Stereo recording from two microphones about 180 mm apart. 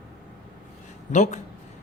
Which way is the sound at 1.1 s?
40° left (ahead or behind).